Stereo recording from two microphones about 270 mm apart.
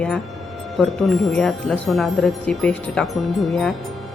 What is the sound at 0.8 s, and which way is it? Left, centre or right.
A woman's voice, centre.